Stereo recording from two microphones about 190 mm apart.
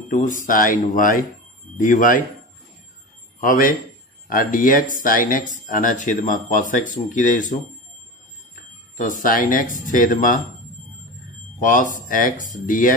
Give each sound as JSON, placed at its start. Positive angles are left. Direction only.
{"t": 0.1, "sound": "speech", "side_deg": 45}
{"t": 3.3, "sound": "a man's voice", "side_deg": 45}
{"t": 8.9, "sound": "speech", "side_deg": 45}
{"t": 11.6, "sound": "speech", "side_deg": 45}